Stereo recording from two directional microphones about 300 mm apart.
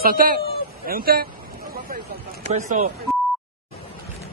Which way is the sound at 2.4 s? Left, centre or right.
Right.